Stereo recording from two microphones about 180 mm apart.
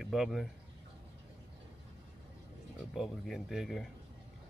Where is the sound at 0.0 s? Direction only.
Centre (ahead or behind).